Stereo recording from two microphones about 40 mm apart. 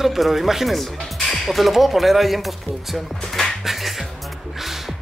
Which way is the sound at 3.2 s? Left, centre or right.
Centre.